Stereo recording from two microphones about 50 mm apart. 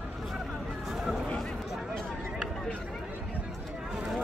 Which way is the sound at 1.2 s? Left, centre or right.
Centre.